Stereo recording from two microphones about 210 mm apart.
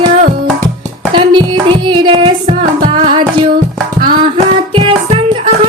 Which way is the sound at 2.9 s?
20° right (ahead or behind).